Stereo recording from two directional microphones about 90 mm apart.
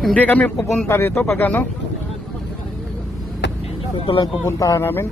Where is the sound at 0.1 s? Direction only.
20° left (ahead or behind).